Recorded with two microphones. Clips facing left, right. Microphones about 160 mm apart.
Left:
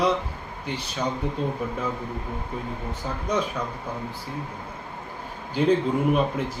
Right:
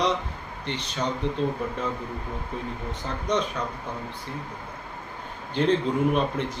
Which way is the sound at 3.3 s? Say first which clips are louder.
Even; 10° left (ahead or behind).